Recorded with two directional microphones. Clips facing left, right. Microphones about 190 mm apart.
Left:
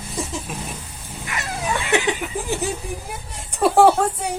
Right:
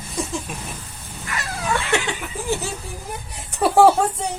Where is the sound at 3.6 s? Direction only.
Centre (ahead or behind).